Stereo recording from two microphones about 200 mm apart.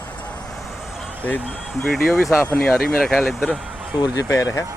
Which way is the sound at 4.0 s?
15° left (ahead or behind).